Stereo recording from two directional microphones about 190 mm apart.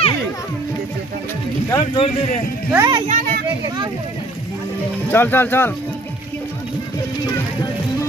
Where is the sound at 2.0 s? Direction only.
40° left (ahead or behind).